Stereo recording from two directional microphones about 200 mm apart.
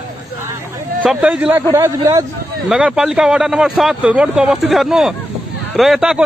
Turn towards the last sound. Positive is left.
turn(degrees=0)  # may be behind; listen again after turning